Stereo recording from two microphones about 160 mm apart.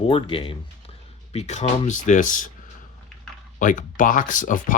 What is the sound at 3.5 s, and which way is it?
Speech, 55° left (ahead or behind).